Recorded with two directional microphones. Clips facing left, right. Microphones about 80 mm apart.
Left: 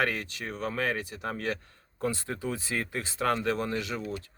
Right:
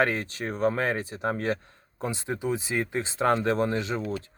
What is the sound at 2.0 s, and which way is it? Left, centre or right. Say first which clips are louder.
Speech: right 1 dB; centre.